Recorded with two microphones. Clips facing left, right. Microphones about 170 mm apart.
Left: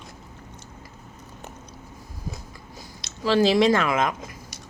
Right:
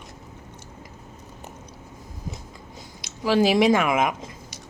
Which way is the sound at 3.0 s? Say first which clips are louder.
Even; 15° right (ahead or behind).